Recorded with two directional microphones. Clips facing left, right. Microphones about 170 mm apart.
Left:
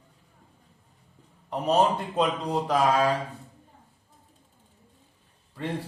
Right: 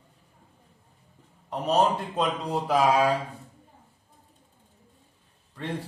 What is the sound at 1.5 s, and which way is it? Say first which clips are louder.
Speech: left 1 dB; centre (ahead or behind).